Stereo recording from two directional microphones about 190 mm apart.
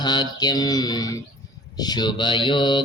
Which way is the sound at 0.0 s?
20° left (ahead or behind).